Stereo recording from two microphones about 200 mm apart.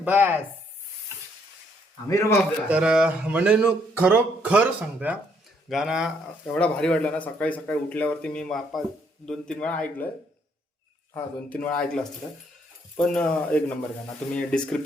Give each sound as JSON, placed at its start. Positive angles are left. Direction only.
{"t": 0.0, "sound": "speech", "side_deg": -10}
{"t": 2.0, "sound": "a man's voice", "side_deg": 15}
{"t": 2.6, "sound": "speech", "side_deg": -5}
{"t": 11.6, "sound": "speech", "side_deg": 5}
{"t": 13.1, "sound": "speech", "side_deg": 5}